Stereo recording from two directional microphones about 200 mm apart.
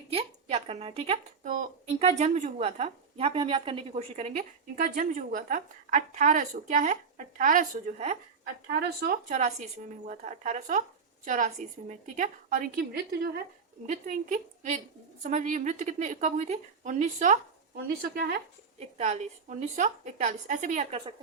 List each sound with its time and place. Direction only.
0.1 s a woman's voice: 30° right (ahead or behind)
8.7 s speech: 50° right (ahead or behind)
9.3 s a woman's voice: 35° right (ahead or behind)
13.8 s a woman's voice: 35° right (ahead or behind)
17.8 s speech: 50° right (ahead or behind)
18.9 s a woman's voice: 35° right (ahead or behind)